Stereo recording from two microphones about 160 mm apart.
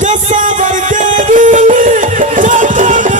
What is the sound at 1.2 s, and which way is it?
Music, 50° right (ahead or behind).